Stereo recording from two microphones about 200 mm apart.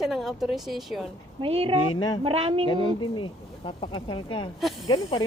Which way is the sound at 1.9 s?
20° left (ahead or behind).